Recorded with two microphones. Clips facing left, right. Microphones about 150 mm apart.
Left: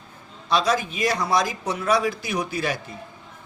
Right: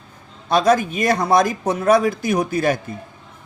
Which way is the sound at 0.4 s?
50° right (ahead or behind).